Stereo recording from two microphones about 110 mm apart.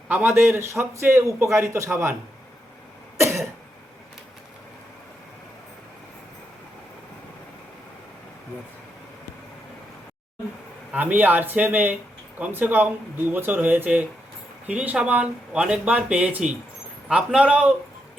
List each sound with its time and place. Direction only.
0.1 s a man's voice: 20° right (ahead or behind)
3.2 s cough: 25° right (ahead or behind)
10.9 s speech: 15° right (ahead or behind)